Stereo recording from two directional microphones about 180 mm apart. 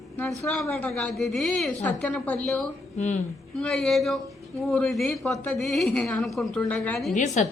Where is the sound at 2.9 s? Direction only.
40° left (ahead or behind).